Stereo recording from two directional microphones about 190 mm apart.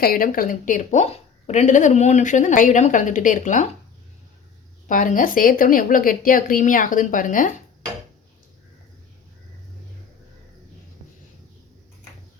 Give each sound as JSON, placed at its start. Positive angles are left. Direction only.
{"t": 0.0, "sound": "a woman's voice", "side_deg": 50}
{"t": 4.9, "sound": "a woman's voice", "side_deg": 45}